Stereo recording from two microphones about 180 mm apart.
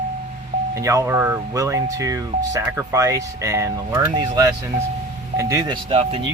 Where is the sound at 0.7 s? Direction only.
20° right (ahead or behind).